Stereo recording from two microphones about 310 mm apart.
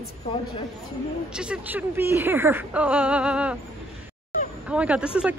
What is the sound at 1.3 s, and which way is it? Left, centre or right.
A woman's voice, centre.